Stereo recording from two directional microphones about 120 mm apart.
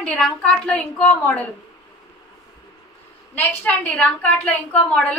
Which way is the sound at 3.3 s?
15° left (ahead or behind).